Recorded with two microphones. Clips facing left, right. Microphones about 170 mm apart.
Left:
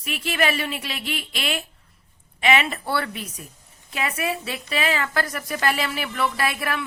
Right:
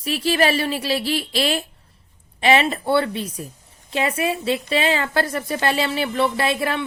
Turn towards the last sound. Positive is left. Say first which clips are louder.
# right 4 dB
turn(degrees=-25)  # may be behind; listen again after turning